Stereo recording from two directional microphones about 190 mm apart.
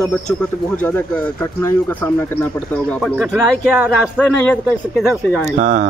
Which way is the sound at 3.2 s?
10° right (ahead or behind).